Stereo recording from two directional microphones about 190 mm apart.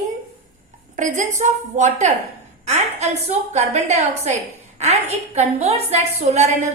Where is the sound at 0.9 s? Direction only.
40° right (ahead or behind).